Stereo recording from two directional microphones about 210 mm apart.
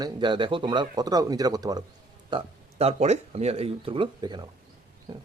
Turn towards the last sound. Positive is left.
turn(degrees=-25)  # may be behind; listen again after turning